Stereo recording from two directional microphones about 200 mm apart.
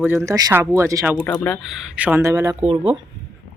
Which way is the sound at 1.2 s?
5° left (ahead or behind).